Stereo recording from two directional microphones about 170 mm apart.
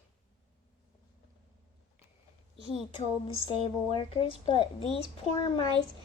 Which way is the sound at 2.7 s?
35° left (ahead or behind).